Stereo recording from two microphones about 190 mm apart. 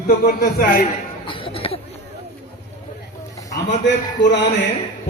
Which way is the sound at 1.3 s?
30° left (ahead or behind).